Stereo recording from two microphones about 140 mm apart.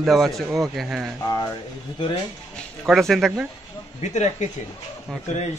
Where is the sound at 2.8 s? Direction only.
Centre (ahead or behind).